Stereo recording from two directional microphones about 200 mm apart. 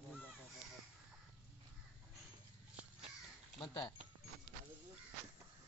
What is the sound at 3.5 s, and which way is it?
Speech, 20° left (ahead or behind).